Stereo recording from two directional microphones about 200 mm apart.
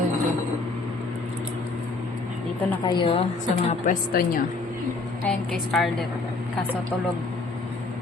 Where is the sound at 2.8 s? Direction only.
25° left (ahead or behind).